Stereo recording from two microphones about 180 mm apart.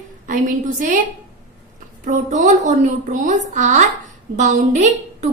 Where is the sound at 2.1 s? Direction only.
40° right (ahead or behind).